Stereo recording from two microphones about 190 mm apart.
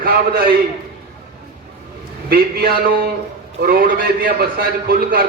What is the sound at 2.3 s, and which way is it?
A man's voice, 55° right (ahead or behind).